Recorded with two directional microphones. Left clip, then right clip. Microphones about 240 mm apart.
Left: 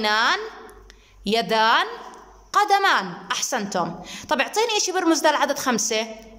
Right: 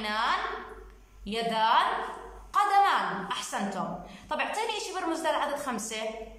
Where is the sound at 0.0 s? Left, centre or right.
Left.